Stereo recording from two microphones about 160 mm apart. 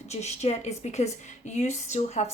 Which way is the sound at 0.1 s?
45° left (ahead or behind).